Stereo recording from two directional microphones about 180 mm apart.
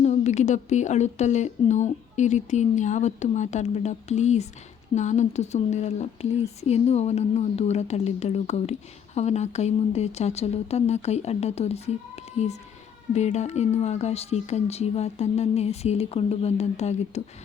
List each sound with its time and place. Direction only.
0.0 s a woman's voice: 40° left (ahead or behind)